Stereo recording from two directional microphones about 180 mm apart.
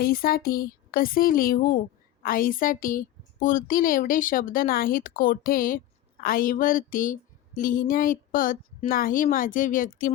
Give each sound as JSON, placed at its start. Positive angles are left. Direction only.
{"t": 0.0, "sound": "a woman's voice", "side_deg": 55}